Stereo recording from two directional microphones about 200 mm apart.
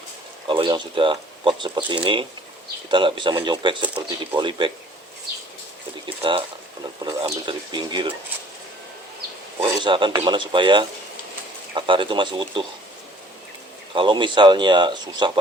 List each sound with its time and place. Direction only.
0.4 s speech: 25° right (ahead or behind)
6.1 s speech: 25° right (ahead or behind)
9.6 s speech: 20° right (ahead or behind)
13.9 s speech: 25° right (ahead or behind)